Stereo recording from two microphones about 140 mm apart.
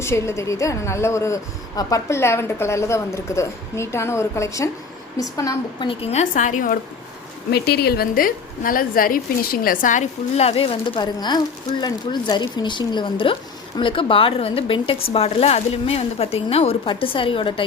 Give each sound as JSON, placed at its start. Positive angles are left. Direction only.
{"t": 0.0, "sound": "a woman's voice", "side_deg": 20}
{"t": 5.9, "sound": "a woman's voice", "side_deg": 45}
{"t": 7.9, "sound": "a woman's voice", "side_deg": 90}